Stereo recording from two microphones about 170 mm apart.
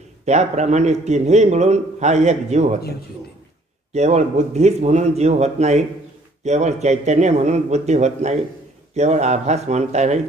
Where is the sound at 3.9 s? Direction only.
40° right (ahead or behind).